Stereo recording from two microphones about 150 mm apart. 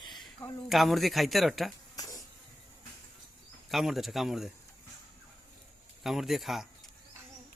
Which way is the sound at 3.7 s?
Centre (ahead or behind).